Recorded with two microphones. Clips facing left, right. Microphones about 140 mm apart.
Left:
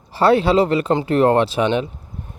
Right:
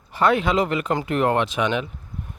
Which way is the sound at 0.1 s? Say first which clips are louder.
Left 5 dB; 30° left (ahead or behind).